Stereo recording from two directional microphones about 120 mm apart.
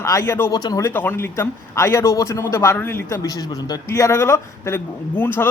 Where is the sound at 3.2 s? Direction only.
30° left (ahead or behind).